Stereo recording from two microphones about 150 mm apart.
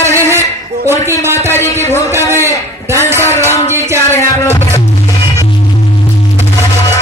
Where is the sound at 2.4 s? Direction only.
15° right (ahead or behind).